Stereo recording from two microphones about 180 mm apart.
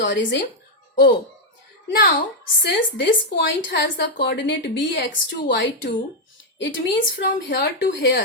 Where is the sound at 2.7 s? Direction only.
70° left (ahead or behind).